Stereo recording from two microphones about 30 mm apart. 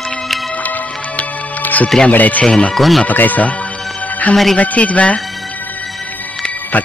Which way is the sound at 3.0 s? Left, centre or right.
Left.